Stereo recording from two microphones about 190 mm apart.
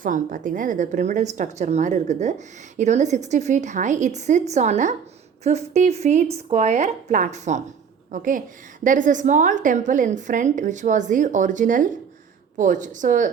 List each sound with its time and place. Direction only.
0.0 s a woman's voice: 45° right (ahead or behind)